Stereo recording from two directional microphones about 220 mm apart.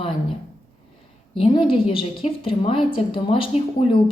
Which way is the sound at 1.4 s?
25° left (ahead or behind).